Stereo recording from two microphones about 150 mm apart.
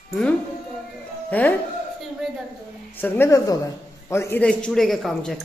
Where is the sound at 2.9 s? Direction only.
15° left (ahead or behind).